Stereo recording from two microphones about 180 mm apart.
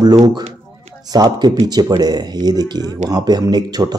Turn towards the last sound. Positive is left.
turn(degrees=-20)  # may be behind; listen again after turning